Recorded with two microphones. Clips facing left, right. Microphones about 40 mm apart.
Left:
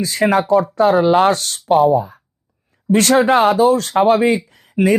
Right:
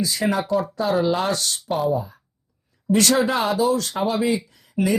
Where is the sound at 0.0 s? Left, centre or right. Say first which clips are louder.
Left 7 dB; left.